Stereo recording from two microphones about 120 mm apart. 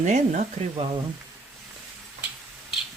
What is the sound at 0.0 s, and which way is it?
Speech, 80° right.